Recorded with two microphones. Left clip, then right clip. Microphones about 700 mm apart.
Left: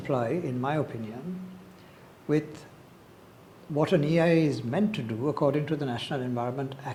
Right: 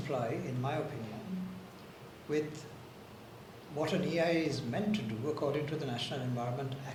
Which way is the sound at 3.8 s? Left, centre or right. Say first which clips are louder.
Left 8 dB; left.